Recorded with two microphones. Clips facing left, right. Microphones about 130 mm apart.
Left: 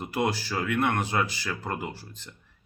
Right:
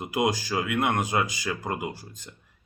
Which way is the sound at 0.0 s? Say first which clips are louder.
Right 2 dB; 15° right (ahead or behind).